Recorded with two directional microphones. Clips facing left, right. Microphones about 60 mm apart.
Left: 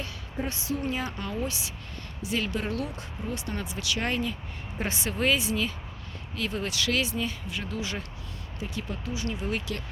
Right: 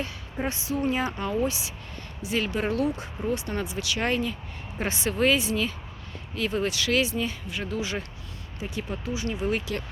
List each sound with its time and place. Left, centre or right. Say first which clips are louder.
0.0 s a woman's voice: right 3 dB; right
3.3 s speech: right 4 dB; centre